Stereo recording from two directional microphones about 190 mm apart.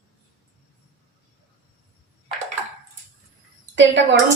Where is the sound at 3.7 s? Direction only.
75° right (ahead or behind).